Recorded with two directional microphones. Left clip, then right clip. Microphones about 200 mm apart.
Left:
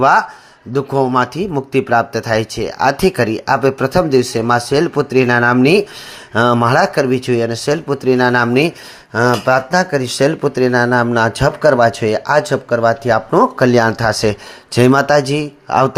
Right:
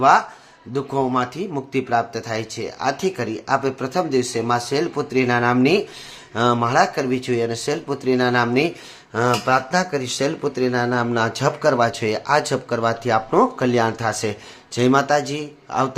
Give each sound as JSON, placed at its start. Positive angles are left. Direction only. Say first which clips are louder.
{"t": 0.0, "sound": "speech", "louder": "left 4 dB", "side_deg": 30}